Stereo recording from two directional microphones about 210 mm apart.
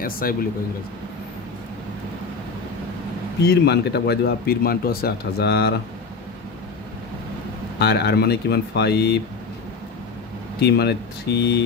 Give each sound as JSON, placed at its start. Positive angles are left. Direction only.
{"t": 0.0, "sound": "speech", "side_deg": 45}
{"t": 3.4, "sound": "speech", "side_deg": 50}
{"t": 7.8, "sound": "speech", "side_deg": 50}
{"t": 10.6, "sound": "speech", "side_deg": 50}